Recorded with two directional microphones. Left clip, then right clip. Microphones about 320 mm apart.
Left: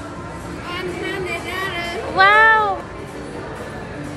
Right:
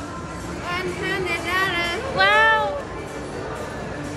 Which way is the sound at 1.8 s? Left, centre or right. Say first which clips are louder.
Left 4 dB; centre.